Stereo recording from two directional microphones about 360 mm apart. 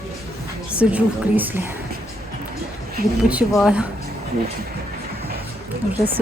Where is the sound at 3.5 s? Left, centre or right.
Centre.